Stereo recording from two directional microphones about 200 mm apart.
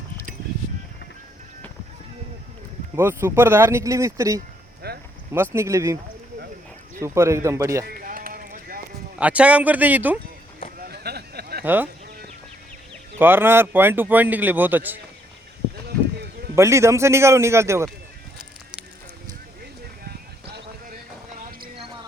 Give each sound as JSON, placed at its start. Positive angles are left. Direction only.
{"t": 2.9, "sound": "speech", "side_deg": -10}
{"t": 4.4, "sound": "music", "side_deg": -50}
{"t": 5.3, "sound": "speech", "side_deg": -10}
{"t": 7.0, "sound": "speech", "side_deg": -15}
{"t": 7.9, "sound": "a sound", "side_deg": -45}
{"t": 9.1, "sound": "speech", "side_deg": -5}
{"t": 10.8, "sound": "a sound", "side_deg": -50}
{"t": 11.6, "sound": "speech", "side_deg": -10}
{"t": 13.1, "sound": "speech", "side_deg": -10}
{"t": 15.9, "sound": "a sound", "side_deg": -50}
{"t": 16.6, "sound": "speech", "side_deg": -15}